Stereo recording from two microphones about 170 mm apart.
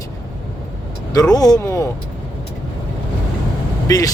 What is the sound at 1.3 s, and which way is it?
Speech, 20° left (ahead or behind).